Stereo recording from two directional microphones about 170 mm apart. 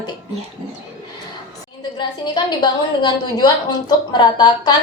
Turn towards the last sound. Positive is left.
turn(degrees=25)  # may be behind; listen again after turning